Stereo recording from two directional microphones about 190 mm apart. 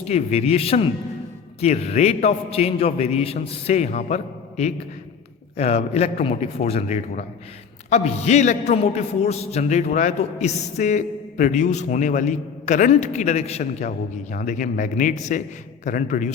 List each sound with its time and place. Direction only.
0.0 s a man's voice: 35° left (ahead or behind)